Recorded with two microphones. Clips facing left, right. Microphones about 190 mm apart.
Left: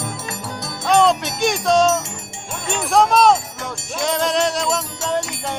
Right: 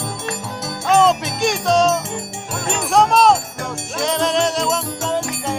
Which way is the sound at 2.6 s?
Centre (ahead or behind).